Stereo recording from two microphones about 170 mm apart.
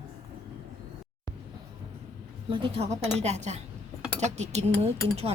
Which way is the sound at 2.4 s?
30° right (ahead or behind).